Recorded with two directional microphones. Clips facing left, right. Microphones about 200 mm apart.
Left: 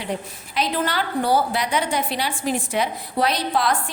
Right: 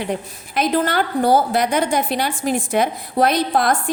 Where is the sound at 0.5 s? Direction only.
50° right (ahead or behind).